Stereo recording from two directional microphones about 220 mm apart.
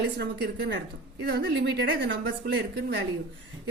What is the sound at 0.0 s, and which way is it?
A woman's voice, 50° right (ahead or behind).